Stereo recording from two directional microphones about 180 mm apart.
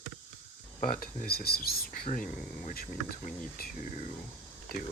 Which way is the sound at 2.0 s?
45° left (ahead or behind).